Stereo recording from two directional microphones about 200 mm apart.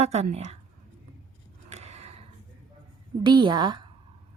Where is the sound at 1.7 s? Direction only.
35° right (ahead or behind).